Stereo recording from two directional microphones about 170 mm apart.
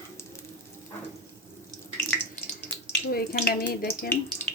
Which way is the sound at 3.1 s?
65° left (ahead or behind).